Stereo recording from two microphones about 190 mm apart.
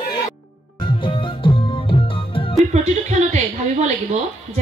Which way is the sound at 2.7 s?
35° right (ahead or behind).